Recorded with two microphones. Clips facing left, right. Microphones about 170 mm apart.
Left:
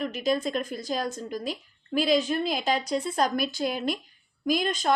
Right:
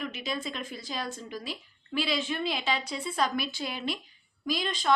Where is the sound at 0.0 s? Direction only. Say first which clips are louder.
Left 8 dB; 40° left (ahead or behind).